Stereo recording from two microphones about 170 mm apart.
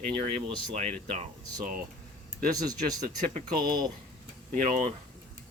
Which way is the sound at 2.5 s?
20° right (ahead or behind).